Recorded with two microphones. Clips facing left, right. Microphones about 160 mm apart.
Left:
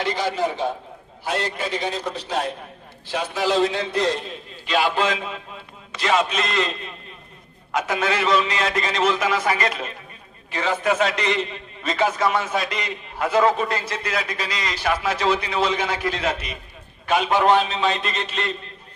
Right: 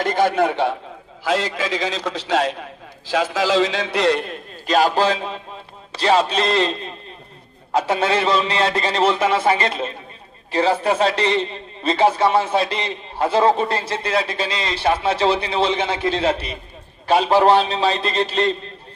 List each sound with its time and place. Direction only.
0.0 s a man's voice: 50° right (ahead or behind); by 0.8 s 70° right (ahead or behind)
1.2 s a man's voice: 90° right; by 4.4 s 65° right (ahead or behind)
4.6 s a man's voice: 40° right (ahead or behind)